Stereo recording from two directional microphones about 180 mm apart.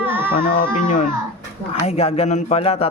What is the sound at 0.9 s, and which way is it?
Speech, 45° left (ahead or behind).